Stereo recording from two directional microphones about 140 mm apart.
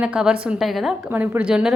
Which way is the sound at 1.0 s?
15° right (ahead or behind).